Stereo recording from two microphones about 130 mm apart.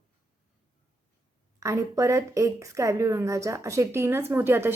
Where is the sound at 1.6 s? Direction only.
25° right (ahead or behind).